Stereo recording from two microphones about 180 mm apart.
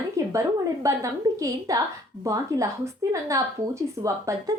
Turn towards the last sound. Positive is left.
turn(degrees=-15)  # may be behind; listen again after turning